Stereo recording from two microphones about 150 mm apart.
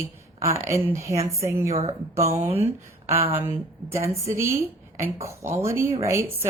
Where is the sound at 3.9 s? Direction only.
20° right (ahead or behind).